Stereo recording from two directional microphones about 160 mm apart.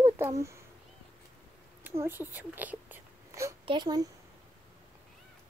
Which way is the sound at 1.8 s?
15° right (ahead or behind).